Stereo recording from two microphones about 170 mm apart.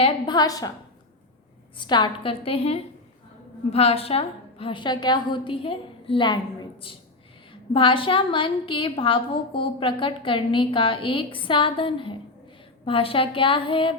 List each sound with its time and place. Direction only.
0.0 s a woman's voice: 25° left (ahead or behind)
1.7 s a woman's voice: 25° left (ahead or behind)